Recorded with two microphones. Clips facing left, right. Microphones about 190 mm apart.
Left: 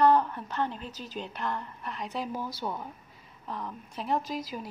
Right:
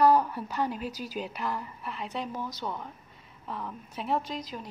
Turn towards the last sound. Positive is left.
turn(degrees=5)  # may be behind; listen again after turning